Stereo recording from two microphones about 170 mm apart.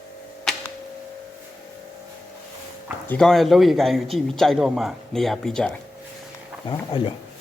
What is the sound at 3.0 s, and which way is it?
Speech, 5° left (ahead or behind).